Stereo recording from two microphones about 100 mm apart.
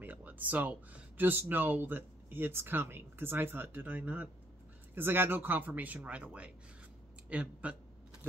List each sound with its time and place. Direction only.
0.0 s speech: 15° right (ahead or behind)